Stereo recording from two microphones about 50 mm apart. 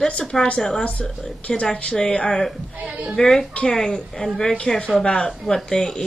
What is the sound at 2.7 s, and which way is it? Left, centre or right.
Speech, right.